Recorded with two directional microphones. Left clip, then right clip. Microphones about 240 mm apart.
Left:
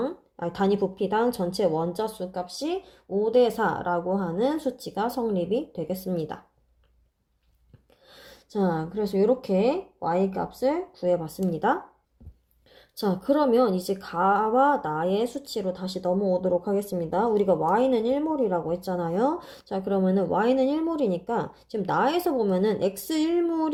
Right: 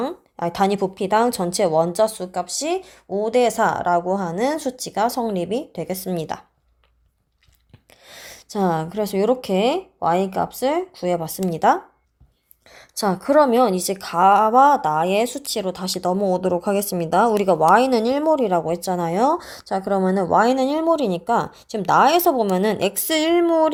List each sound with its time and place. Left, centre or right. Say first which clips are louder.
0.5 s speech: right 4 dB; centre
2.4 s speech: right 8 dB; right
2.8 s a woman's voice: right 3 dB; centre
8.0 s a sound: right 9 dB; centre
9.1 s speech: right 3 dB; right
9.4 s speech: right 4 dB; right
10.2 s a woman's voice: right 5 dB; right